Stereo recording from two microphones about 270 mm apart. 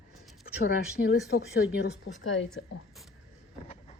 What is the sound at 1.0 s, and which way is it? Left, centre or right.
Speech, left.